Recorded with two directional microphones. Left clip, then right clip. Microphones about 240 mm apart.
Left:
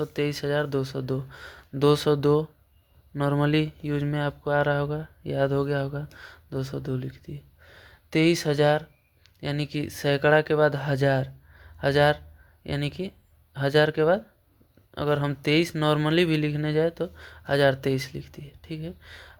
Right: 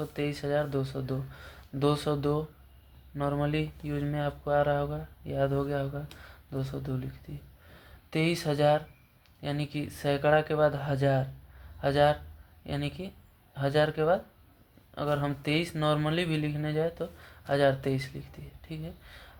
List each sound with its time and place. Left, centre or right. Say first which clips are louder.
0.0 s speech: left 6 dB; left